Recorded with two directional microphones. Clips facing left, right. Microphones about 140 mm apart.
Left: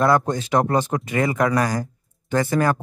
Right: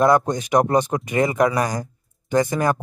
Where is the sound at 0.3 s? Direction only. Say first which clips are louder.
Right 2 dB; 15° right (ahead or behind).